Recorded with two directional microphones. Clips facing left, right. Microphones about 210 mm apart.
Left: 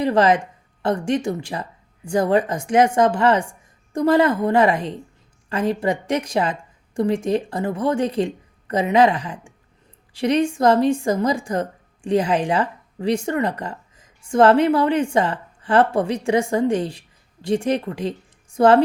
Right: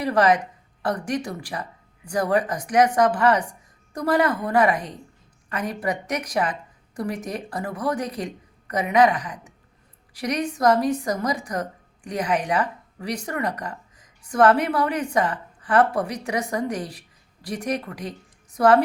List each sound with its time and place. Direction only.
0.0 s a woman's voice: 25° left (ahead or behind)